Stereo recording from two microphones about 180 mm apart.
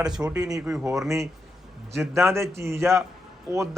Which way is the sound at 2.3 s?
15° right (ahead or behind).